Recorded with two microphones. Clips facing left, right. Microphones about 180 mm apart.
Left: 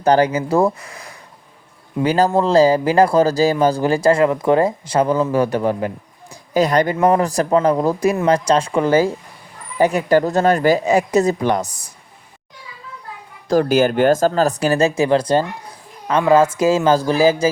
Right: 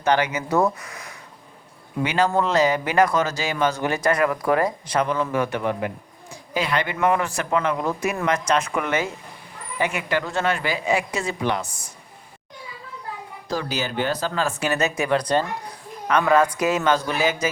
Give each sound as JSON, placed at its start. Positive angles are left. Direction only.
{"t": 0.0, "sound": "speech", "side_deg": 35}
{"t": 13.5, "sound": "speech", "side_deg": 50}